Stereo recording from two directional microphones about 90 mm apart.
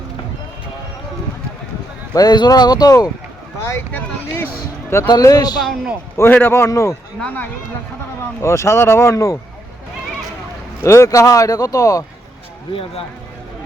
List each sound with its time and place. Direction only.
2.1 s speech: 50° left (ahead or behind)
3.7 s speech: 20° left (ahead or behind)
5.0 s speech: 45° left (ahead or behind)
6.1 s speech: 25° left (ahead or behind)
7.2 s speech: 20° left (ahead or behind)
8.4 s speech: 30° left (ahead or behind)
10.8 s speech: 35° left (ahead or behind)
12.7 s speech: 90° left